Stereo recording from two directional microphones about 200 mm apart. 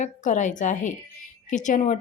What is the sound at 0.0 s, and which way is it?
A woman's voice, 40° left (ahead or behind).